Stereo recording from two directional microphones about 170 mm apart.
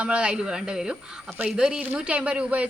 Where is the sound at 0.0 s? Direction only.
5° right (ahead or behind).